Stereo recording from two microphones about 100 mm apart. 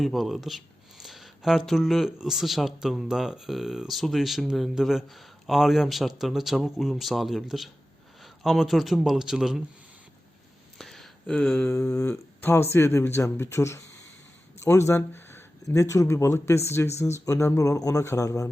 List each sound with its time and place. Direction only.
0.0 s speech: centre (ahead or behind)
10.8 s a sound: centre (ahead or behind)
12.4 s speech: 20° left (ahead or behind)